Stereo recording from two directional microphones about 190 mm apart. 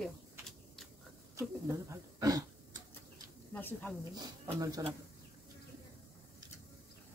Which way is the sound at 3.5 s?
10° left (ahead or behind).